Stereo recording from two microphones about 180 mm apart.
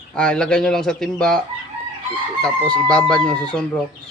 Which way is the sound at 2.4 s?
5° left (ahead or behind).